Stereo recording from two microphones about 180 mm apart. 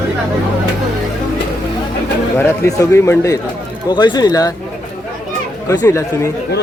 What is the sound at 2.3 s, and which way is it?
A man's voice, 15° left (ahead or behind).